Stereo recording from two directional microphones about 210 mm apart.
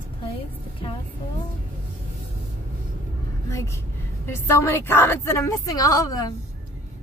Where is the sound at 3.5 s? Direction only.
15° left (ahead or behind).